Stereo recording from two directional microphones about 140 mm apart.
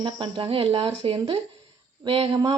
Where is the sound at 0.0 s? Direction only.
40° right (ahead or behind).